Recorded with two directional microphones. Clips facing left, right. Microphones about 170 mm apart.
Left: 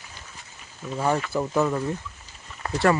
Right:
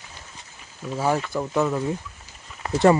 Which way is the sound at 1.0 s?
5° right (ahead or behind).